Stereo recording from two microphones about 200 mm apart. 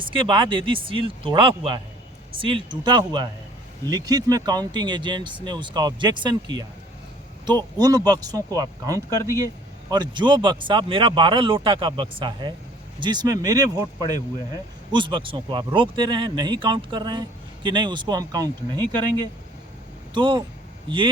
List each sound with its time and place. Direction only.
0.0 s speech: 25° right (ahead or behind)
14.9 s speech: 25° right (ahead or behind)